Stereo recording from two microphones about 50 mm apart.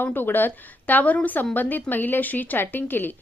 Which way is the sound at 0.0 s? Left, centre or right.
Left.